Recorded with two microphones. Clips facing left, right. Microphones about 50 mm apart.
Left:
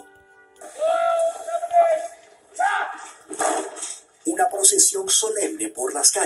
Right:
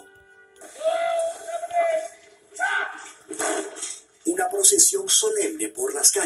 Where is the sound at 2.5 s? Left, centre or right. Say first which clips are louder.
Left 3 dB; left.